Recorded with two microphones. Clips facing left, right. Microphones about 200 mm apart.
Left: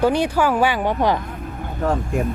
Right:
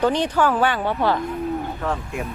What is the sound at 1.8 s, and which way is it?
Speech, 40° left (ahead or behind).